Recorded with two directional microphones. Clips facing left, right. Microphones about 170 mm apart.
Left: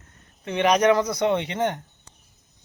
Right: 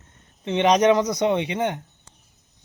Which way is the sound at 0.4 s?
20° right (ahead or behind).